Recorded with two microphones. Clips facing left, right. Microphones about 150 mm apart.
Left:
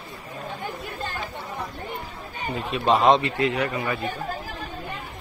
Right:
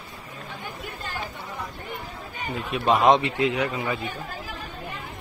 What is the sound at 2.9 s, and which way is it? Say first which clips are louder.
A man's voice: even; 10° right (ahead or behind).